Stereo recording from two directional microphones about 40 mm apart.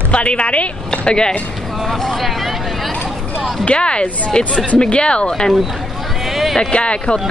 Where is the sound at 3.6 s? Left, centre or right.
Left.